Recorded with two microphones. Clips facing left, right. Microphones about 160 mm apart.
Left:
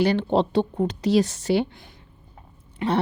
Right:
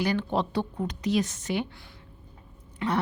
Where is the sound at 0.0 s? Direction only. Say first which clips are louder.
Left 6 dB; 30° left (ahead or behind).